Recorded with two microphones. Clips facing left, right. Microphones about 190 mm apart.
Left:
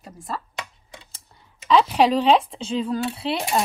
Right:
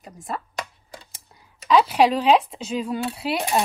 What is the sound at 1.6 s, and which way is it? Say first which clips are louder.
Speech: even; centre (ahead or behind).